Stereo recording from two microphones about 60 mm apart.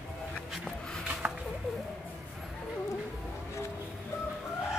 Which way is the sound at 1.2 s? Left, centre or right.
Centre.